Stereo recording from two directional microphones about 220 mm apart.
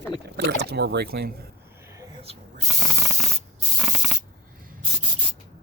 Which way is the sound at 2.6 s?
15° right (ahead or behind).